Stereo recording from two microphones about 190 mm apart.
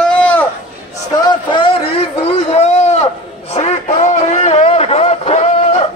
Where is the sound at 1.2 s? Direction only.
25° left (ahead or behind).